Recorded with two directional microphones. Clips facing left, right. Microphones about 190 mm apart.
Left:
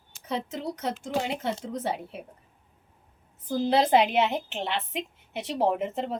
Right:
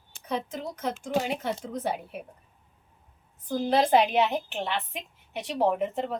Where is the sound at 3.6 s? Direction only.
20° left (ahead or behind).